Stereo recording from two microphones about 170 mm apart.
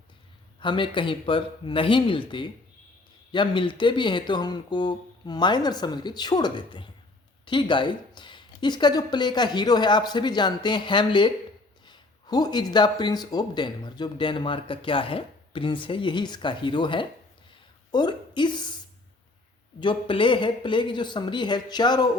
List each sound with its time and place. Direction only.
0.6 s speech: 30° left (ahead or behind)
19.8 s speech: 30° left (ahead or behind)